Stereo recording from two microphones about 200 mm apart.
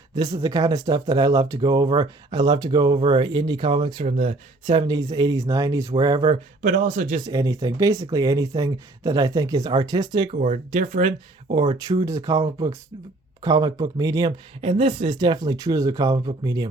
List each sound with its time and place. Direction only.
0.2 s speech: 20° right (ahead or behind)
6.2 s speech: 40° right (ahead or behind)
7.3 s speech: 20° right (ahead or behind)
10.4 s speech: 35° right (ahead or behind)
11.8 s speech: 15° right (ahead or behind)